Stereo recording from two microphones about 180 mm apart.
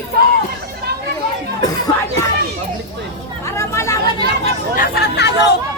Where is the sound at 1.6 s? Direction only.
20° left (ahead or behind).